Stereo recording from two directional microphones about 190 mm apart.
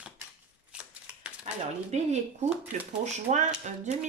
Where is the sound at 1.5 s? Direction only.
40° right (ahead or behind).